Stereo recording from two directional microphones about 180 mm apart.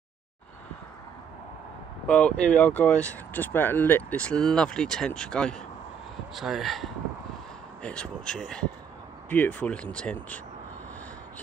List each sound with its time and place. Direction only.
2.0 s speech: 5° left (ahead or behind)